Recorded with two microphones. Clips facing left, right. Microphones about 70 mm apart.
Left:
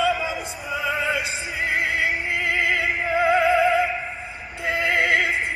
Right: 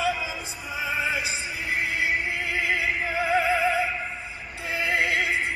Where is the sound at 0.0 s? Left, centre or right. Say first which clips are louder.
Left 5 dB; left.